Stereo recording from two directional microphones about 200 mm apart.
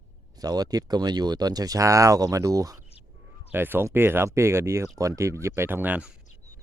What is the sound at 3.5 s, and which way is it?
Speech, 10° right (ahead or behind).